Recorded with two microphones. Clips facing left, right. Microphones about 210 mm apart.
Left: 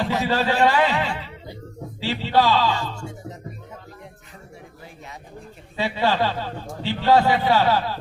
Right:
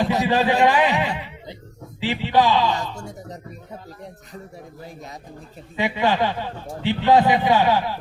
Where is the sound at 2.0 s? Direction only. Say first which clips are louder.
Right 1 dB; 15° right (ahead or behind).